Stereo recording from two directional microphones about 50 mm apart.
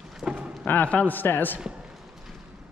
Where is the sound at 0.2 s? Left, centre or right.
Right.